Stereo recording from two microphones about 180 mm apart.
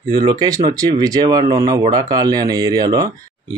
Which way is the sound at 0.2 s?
20° right (ahead or behind).